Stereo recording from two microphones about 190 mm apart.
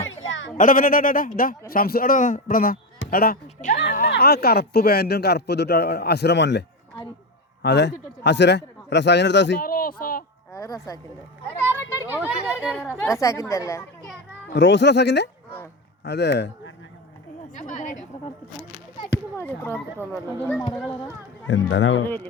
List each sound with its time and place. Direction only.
0.0 s a sound: 90° left
0.5 s speech: 45° left (ahead or behind); by 9.6 s 65° left (ahead or behind)
9.6 s speech: 50° left (ahead or behind)
10.5 s a woman's voice: 15° left (ahead or behind)
11.9 s speech: 10° right (ahead or behind)
12.7 s a child's voice: 10° left (ahead or behind)
14.5 s speech: 70° left (ahead or behind)
17.7 s speech: 40° left (ahead or behind)
19.4 s a child's voice: 10° left (ahead or behind)
21.4 s speech: 90° left